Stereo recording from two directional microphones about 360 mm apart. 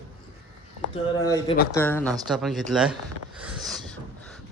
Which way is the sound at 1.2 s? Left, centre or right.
Centre.